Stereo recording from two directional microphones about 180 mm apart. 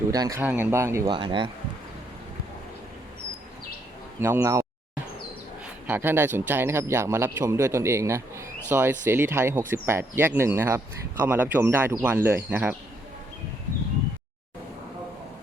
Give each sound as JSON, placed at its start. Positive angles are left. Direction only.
{"t": 0.1, "sound": "speech", "side_deg": -20}
{"t": 1.0, "sound": "speech", "side_deg": -25}
{"t": 4.2, "sound": "speech", "side_deg": -15}
{"t": 5.9, "sound": "speech", "side_deg": -10}